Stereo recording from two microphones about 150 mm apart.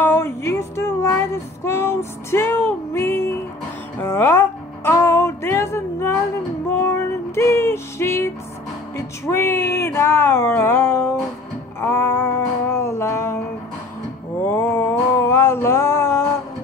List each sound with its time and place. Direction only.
0.0 s music: 15° left (ahead or behind)
8.9 s speech: 15° left (ahead or behind)
11.8 s music: 15° left (ahead or behind)
14.4 s music: 15° left (ahead or behind)